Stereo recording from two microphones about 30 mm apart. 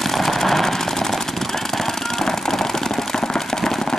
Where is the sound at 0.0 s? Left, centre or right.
Centre.